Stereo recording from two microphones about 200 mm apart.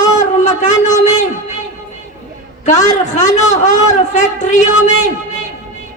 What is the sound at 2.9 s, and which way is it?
A man's voice, 35° left (ahead or behind).